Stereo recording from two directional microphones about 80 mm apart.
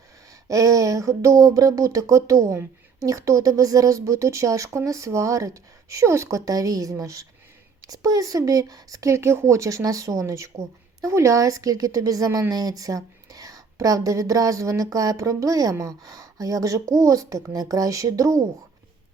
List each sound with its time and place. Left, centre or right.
0.4 s a woman's voice: right